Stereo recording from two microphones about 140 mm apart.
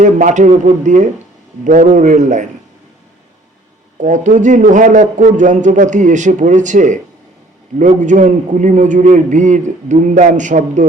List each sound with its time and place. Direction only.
0.0 s a man's voice: 60° right (ahead or behind)
4.0 s a man's voice: 65° right (ahead or behind)